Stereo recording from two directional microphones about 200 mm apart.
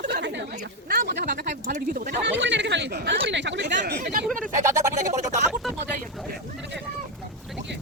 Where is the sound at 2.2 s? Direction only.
65° right (ahead or behind).